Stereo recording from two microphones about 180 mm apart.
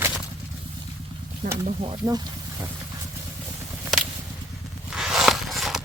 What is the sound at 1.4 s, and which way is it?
Speech, 45° right (ahead or behind).